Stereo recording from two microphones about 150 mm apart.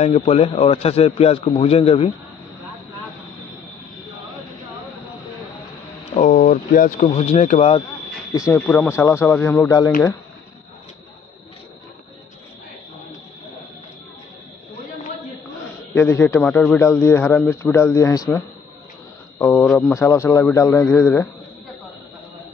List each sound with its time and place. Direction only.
0.0 s a man's voice: 45° left (ahead or behind)
6.2 s a sound: 65° left (ahead or behind)
7.2 s a man's voice: 45° left (ahead or behind)
8.5 s speech: 10° left (ahead or behind)
15.9 s a man's voice: 15° left (ahead or behind)